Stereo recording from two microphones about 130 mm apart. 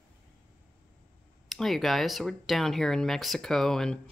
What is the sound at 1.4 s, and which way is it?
Speech, centre (ahead or behind).